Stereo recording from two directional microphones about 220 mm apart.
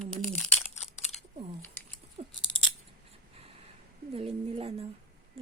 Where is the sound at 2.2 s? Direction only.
30° right (ahead or behind).